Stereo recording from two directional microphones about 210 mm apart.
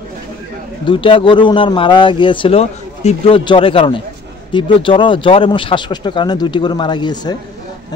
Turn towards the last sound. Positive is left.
turn(degrees=20)  # may be behind; listen again after turning